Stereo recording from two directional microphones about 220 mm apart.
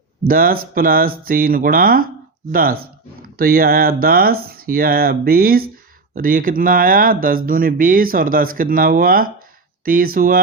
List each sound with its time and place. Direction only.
0.3 s speech: 40° right (ahead or behind)